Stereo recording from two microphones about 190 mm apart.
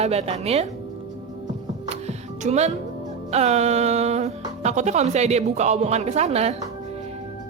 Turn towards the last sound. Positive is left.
turn(degrees=-35)  # may be behind; listen again after turning